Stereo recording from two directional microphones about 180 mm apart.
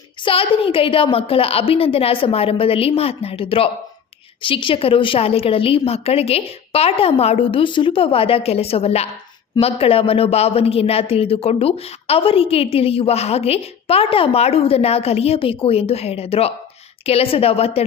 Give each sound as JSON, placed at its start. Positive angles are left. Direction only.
{"t": 0.3, "sound": "speech", "side_deg": 30}